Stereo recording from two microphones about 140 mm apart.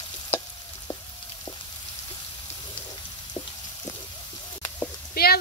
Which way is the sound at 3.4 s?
45° left (ahead or behind).